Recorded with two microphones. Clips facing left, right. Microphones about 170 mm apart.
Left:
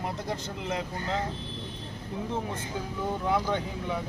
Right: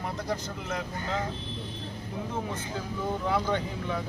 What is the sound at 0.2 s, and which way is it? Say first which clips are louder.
Speech: right 1 dB; 25° left (ahead or behind).